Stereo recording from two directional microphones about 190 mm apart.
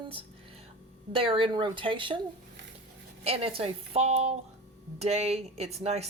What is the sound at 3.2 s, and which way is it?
Speech, 30° right (ahead or behind).